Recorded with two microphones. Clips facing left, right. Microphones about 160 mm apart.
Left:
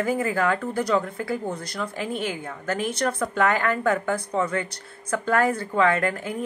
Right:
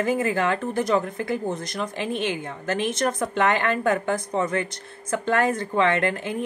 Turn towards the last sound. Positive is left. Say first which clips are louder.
# even
turn(degrees=-25)  # may be behind; listen again after turning